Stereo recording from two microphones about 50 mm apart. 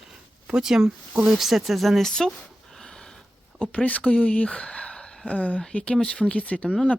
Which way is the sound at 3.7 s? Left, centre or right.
Left.